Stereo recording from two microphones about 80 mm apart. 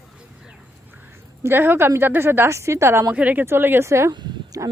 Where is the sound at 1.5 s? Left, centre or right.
Right.